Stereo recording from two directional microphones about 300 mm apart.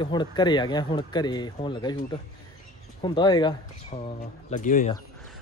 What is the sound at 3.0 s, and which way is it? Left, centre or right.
Speech, centre.